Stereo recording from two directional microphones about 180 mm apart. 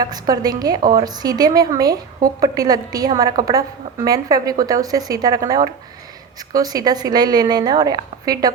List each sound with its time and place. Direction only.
0.0 s a woman's voice: 20° right (ahead or behind)